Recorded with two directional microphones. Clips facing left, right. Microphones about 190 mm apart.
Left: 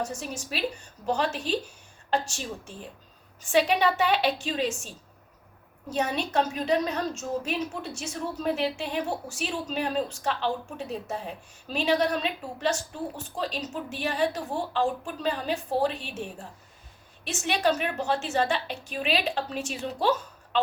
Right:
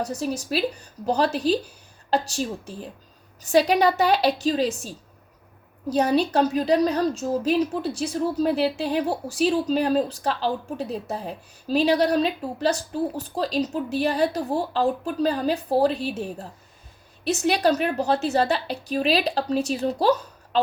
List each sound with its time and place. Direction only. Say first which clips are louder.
0.0 s a woman's voice: right 6 dB; 35° right (ahead or behind)